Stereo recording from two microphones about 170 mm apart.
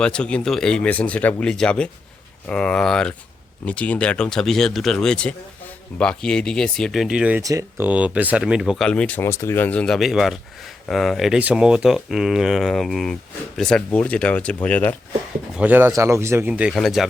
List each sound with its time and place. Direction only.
0.0 s speech: 5° left (ahead or behind)
7.4 s speech: 20° right (ahead or behind)
7.9 s speech: 10° right (ahead or behind); by 14.9 s 10° left (ahead or behind)
15.5 s speech: 10° right (ahead or behind)